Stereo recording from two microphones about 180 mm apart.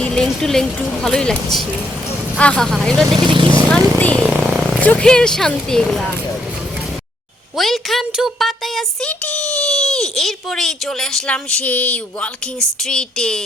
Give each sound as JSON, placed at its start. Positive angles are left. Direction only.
{"t": 0.0, "sound": "speech", "side_deg": 5}
{"t": 2.4, "sound": "speech", "side_deg": 5}
{"t": 3.2, "sound": "speech", "side_deg": -25}
{"t": 3.7, "sound": "speech", "side_deg": 5}
{"t": 4.2, "sound": "a sound", "side_deg": -5}
{"t": 4.8, "sound": "speech", "side_deg": 5}
{"t": 7.5, "sound": "speech", "side_deg": 0}